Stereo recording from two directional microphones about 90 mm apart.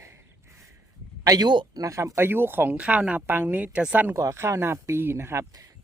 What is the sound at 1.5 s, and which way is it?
Speech, 60° right (ahead or behind).